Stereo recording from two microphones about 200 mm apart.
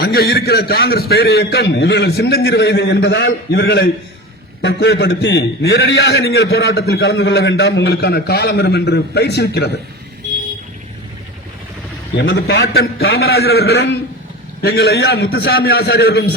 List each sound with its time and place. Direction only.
0.0 s a man's voice: 50° left (ahead or behind)
12.1 s a man's voice: 55° left (ahead or behind)